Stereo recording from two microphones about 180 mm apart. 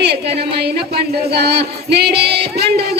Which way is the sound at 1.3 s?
65° right (ahead or behind).